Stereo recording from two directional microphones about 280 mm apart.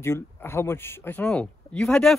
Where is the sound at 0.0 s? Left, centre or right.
Centre.